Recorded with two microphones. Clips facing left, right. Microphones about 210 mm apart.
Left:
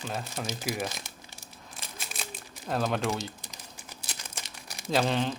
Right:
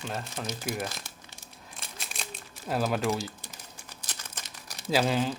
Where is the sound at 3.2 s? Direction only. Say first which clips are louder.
Right 1 dB; 20° left (ahead or behind).